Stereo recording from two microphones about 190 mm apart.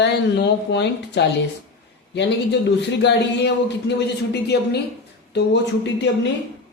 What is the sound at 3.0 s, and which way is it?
Speech, 65° left (ahead or behind).